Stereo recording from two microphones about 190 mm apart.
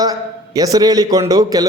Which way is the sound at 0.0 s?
20° right (ahead or behind).